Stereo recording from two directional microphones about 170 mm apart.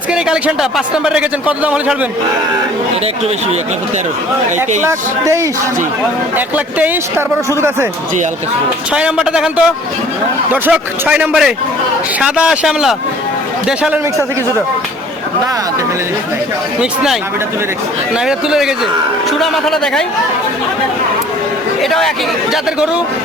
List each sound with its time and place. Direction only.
0.1 s a man's voice: 5° right (ahead or behind)
4.5 s a man's voice: 15° right (ahead or behind)
8.9 s a man's voice: 5° right (ahead or behind)
16.8 s a man's voice: 5° right (ahead or behind)
18.3 s a man's voice: 5° right (ahead or behind)
21.8 s speech: centre (ahead or behind)